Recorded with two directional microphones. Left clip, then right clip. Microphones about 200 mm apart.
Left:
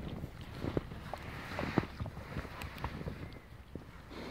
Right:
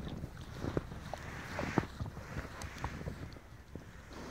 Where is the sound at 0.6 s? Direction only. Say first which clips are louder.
Left 1 dB; 10° left (ahead or behind).